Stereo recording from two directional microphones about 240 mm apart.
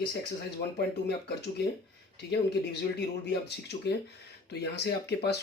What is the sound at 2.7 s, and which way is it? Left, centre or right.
Speech, left.